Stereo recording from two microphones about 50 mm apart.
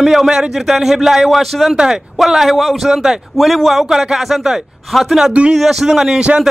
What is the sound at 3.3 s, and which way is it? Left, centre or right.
A man's voice, centre.